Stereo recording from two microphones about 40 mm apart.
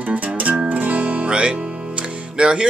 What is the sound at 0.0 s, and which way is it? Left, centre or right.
Music, right.